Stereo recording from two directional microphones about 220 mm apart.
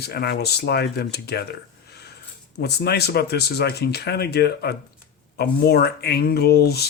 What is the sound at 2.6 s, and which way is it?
Speech, 45° left (ahead or behind).